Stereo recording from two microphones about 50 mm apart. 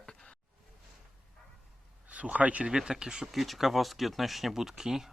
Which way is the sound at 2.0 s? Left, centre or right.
Right.